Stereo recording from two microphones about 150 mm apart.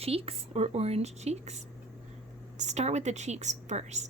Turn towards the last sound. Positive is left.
turn(degrees=-50)  # may be behind; listen again after turning